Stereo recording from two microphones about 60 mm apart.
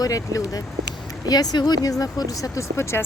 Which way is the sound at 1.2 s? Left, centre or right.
Left.